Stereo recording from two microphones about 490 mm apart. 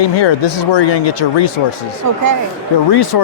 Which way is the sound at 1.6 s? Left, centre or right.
Left.